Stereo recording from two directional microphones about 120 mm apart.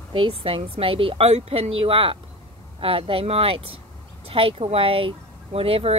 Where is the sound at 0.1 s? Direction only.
50° right (ahead or behind).